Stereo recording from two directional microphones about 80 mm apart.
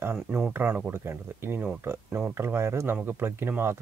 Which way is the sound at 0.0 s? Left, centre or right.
Right.